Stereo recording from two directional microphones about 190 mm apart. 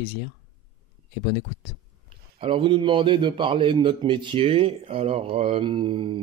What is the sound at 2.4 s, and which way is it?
A man's voice, 25° right (ahead or behind).